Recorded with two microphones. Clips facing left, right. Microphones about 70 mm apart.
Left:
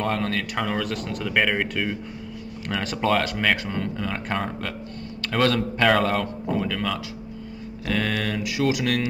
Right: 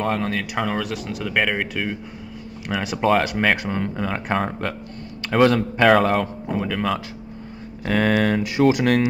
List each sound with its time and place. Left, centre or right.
0.0 s a man's voice: centre; by 9.0 s right